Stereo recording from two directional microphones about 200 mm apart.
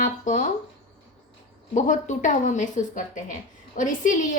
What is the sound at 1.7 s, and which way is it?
Speech, 40° left (ahead or behind).